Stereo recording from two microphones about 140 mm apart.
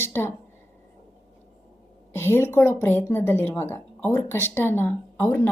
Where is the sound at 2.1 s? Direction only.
15° left (ahead or behind).